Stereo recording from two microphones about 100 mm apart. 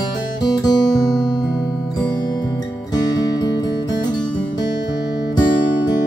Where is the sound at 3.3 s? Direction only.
45° left (ahead or behind).